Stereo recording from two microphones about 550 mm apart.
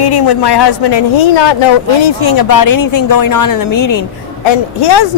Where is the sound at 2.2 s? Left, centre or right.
Left.